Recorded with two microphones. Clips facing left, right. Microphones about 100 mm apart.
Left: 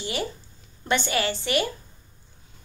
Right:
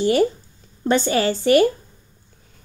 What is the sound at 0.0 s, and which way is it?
A woman's voice, 45° right (ahead or behind).